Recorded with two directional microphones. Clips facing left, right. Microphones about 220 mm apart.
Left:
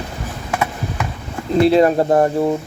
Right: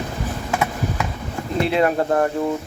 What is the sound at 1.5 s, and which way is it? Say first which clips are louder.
Speech: left 6 dB; 35° left (ahead or behind).